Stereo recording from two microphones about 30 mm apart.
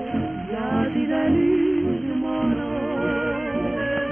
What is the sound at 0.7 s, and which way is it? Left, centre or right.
Music, centre.